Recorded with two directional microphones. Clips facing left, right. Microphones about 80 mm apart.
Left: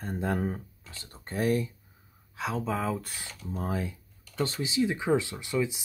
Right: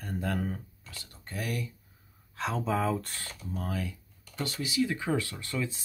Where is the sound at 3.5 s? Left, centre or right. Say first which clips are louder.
Left 3 dB; left.